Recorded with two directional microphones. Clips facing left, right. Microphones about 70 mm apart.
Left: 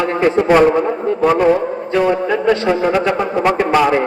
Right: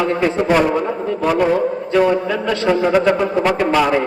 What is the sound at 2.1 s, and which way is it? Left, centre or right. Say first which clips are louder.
Speech: left 3 dB; left.